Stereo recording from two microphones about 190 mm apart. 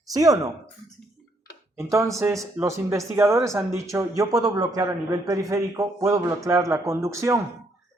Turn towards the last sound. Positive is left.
turn(degrees=-15)  # may be behind; listen again after turning